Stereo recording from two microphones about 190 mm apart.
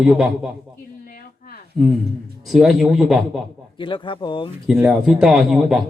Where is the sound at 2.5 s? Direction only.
Centre (ahead or behind).